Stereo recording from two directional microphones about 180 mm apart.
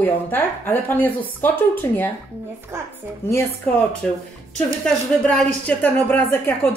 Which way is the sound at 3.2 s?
10° left (ahead or behind).